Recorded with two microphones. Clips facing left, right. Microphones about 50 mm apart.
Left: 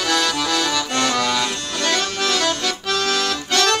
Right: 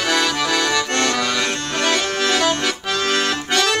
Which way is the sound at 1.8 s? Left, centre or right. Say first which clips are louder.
Right 1 dB; centre.